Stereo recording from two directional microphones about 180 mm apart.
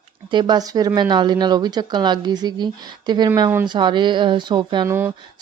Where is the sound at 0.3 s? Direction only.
25° right (ahead or behind).